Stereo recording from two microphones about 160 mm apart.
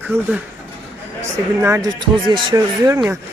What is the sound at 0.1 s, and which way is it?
Speech, 15° right (ahead or behind).